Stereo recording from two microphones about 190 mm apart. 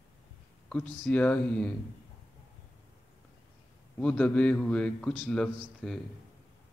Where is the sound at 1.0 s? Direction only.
5° left (ahead or behind).